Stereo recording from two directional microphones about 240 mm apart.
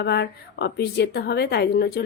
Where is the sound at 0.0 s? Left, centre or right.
Left.